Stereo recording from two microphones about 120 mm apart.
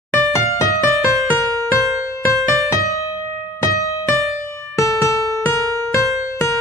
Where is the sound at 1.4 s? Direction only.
25° left (ahead or behind).